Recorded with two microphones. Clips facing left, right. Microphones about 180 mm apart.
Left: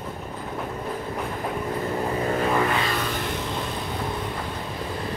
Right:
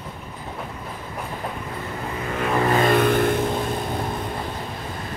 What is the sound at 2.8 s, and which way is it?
Vehicle, 55° right (ahead or behind).